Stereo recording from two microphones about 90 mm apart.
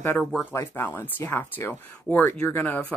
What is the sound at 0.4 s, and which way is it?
Speech, 25° left (ahead or behind).